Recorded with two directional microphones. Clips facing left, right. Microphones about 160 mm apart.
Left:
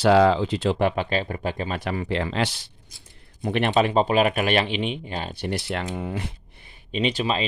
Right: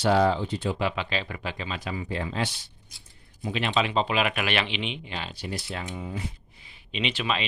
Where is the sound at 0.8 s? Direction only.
55° left (ahead or behind).